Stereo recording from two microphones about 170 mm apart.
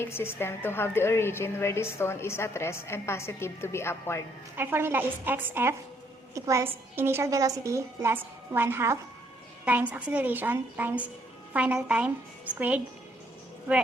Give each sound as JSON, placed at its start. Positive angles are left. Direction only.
{"t": 0.0, "sound": "a woman's voice", "side_deg": 15}
{"t": 4.5, "sound": "a woman's voice", "side_deg": -15}